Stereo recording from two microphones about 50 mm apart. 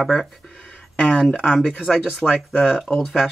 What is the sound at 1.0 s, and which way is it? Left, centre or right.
Speech, left.